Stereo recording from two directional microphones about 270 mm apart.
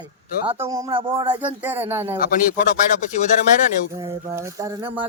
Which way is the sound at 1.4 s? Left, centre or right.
Centre.